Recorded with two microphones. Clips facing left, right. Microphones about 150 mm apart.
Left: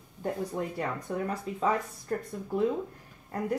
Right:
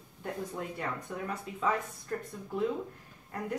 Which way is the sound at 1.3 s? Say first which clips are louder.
Left 2 dB; 35° left (ahead or behind).